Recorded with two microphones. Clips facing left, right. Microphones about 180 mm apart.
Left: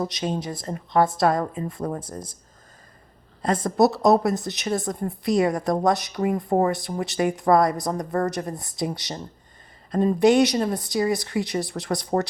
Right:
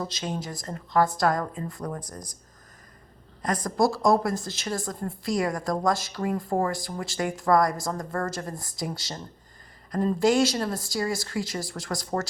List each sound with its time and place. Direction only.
0.0 s a woman's voice: 20° left (ahead or behind)
3.4 s a woman's voice: 25° left (ahead or behind)